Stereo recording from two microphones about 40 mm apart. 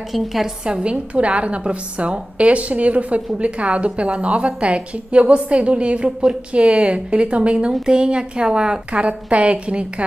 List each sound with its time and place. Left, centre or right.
0.1 s a woman's voice: centre
0.7 s a woman's voice: right